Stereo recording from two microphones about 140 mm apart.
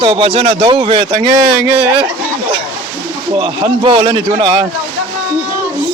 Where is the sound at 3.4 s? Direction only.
35° right (ahead or behind).